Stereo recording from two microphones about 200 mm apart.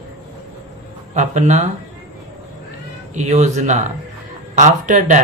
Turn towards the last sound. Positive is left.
turn(degrees=-40)  # may be behind; listen again after turning